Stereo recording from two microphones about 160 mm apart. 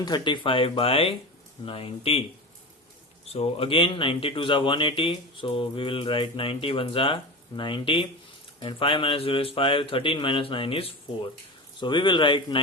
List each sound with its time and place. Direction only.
0.0 s speech: 30° left (ahead or behind)
3.3 s speech: 35° left (ahead or behind)